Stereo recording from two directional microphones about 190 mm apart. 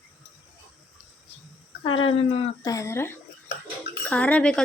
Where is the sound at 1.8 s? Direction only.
30° left (ahead or behind).